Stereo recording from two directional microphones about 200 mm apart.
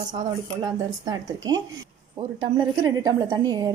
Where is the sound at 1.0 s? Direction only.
20° right (ahead or behind).